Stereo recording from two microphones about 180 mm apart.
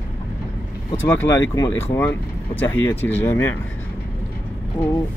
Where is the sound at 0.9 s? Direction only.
15° left (ahead or behind).